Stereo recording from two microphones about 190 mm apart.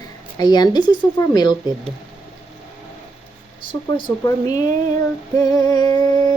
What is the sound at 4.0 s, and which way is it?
Speech, 20° left (ahead or behind).